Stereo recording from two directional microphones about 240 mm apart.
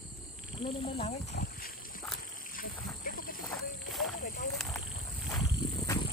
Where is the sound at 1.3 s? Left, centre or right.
Left.